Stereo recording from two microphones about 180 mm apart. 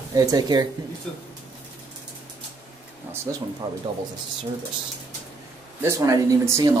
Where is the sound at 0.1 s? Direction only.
20° right (ahead or behind).